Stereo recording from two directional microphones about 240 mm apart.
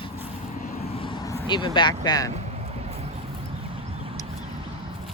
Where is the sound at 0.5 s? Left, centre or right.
Left.